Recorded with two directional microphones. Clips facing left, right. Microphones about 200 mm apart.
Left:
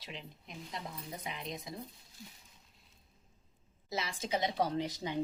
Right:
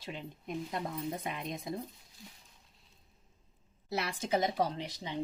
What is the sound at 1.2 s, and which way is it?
Speech, 55° right (ahead or behind).